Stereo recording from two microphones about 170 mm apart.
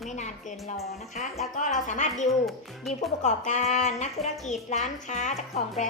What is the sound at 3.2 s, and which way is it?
Speech, 45° left (ahead or behind).